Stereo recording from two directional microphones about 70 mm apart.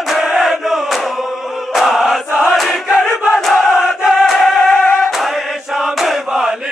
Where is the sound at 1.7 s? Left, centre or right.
Centre.